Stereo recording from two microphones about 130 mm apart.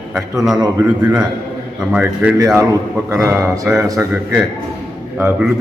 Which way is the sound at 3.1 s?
25° right (ahead or behind).